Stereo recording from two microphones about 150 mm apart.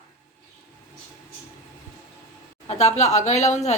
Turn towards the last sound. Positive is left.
turn(degrees=45)  # may be behind; listen again after turning